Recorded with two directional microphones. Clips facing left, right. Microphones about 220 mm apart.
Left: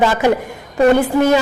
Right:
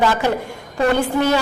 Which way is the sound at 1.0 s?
10° left (ahead or behind).